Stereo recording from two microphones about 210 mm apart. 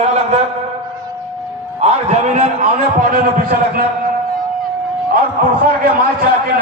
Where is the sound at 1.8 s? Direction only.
30° right (ahead or behind).